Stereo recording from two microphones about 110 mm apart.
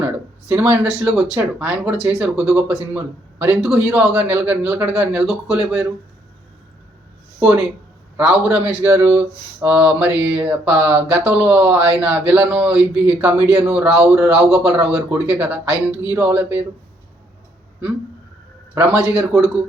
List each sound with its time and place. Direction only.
0.0 s a sound: 15° right (ahead or behind)
0.7 s a man's voice: 10° right (ahead or behind)
4.1 s speech: 15° right (ahead or behind)
4.9 s speech: 5° right (ahead or behind)
7.3 s a man's voice: 15° right (ahead or behind)
18.7 s speech: 15° right (ahead or behind)